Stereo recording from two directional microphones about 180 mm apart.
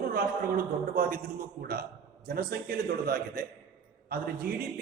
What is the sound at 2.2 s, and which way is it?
A man's voice, 55° right (ahead or behind).